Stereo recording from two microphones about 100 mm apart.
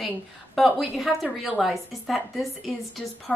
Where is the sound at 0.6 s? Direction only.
Centre (ahead or behind).